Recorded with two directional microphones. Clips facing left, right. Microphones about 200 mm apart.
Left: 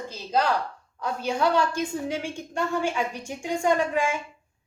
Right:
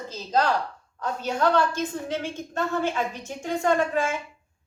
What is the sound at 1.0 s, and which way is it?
A woman's voice, 10° left (ahead or behind).